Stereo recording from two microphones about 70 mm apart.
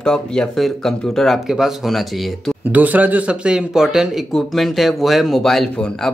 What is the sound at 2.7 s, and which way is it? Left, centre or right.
Speech, right.